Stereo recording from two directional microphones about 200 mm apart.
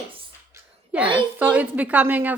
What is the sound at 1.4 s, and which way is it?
Speech, 10° right (ahead or behind).